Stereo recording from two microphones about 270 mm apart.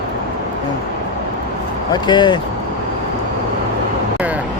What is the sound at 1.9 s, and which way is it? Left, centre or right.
Speech, centre.